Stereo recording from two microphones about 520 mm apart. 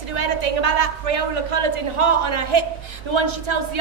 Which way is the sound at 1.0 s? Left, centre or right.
Right.